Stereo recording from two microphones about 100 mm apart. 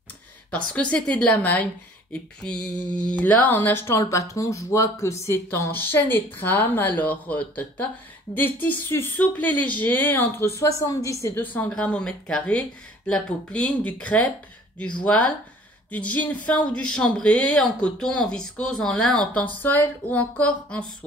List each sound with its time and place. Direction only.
0.5 s speech: 15° left (ahead or behind)
11.7 s speech: 10° left (ahead or behind)